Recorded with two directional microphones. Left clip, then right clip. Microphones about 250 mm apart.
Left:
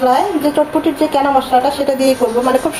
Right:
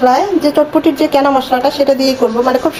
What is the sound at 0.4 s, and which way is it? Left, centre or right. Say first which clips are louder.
A woman's voice: right 3 dB; right.